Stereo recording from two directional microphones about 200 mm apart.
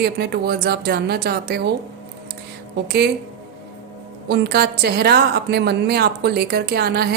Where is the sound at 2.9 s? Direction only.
55° right (ahead or behind).